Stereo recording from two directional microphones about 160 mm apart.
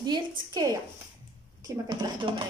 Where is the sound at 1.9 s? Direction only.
25° right (ahead or behind).